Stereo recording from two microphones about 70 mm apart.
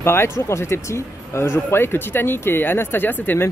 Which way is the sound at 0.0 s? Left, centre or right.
Left.